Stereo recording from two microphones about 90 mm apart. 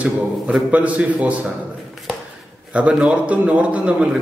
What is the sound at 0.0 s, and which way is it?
A man's voice, 15° right (ahead or behind).